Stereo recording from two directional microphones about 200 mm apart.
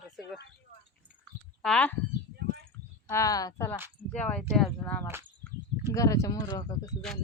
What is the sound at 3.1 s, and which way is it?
Speech, 15° left (ahead or behind).